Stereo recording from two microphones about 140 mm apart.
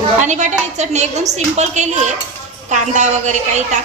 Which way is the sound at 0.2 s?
60° right (ahead or behind).